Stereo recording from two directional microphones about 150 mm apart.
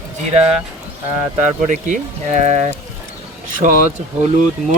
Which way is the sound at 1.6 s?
55° right (ahead or behind).